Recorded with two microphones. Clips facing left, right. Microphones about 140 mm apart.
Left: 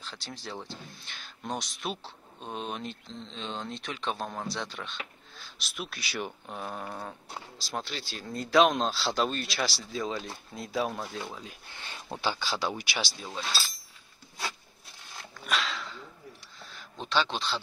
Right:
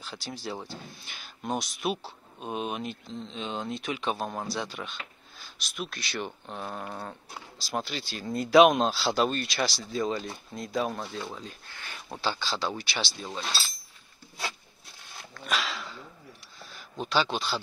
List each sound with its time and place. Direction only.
0.0 s speech: 5° right (ahead or behind)
11.6 s speech: 20° left (ahead or behind)
13.4 s speech: 25° right (ahead or behind)
15.4 s dog: 5° right (ahead or behind)
17.0 s speech: 5° right (ahead or behind)